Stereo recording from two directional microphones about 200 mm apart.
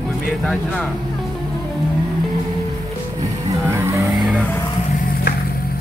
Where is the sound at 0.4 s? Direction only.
Centre (ahead or behind).